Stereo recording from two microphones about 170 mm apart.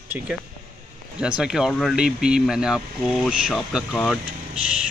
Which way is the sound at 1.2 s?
5° right (ahead or behind).